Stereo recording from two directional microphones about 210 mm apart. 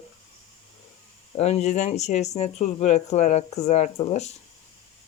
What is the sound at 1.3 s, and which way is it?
Speech, 30° left (ahead or behind).